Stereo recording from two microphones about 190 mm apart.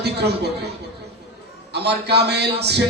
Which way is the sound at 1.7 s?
60° right (ahead or behind).